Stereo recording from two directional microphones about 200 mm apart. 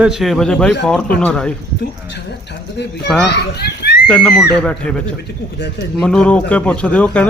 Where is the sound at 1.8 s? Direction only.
55° left (ahead or behind).